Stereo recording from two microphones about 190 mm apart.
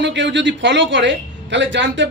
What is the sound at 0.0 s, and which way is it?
A man's voice, 70° right (ahead or behind).